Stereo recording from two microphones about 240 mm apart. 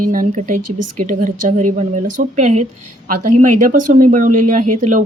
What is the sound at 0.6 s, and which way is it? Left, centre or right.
Speech, right.